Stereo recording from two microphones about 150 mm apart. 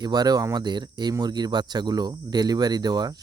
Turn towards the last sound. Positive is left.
turn(degrees=-25)  # may be behind; listen again after turning